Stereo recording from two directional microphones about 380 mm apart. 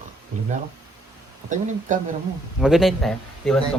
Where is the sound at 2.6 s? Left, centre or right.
Centre.